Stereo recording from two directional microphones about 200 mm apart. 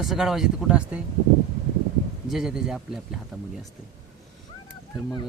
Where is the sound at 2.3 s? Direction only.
Centre (ahead or behind).